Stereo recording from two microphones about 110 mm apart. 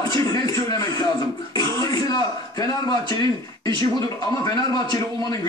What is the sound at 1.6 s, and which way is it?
Speech, 35° left (ahead or behind).